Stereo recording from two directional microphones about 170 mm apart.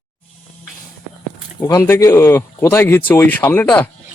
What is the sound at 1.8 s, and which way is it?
Speech, 15° left (ahead or behind).